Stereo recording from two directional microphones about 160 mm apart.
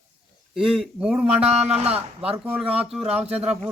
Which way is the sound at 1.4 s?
40° right (ahead or behind).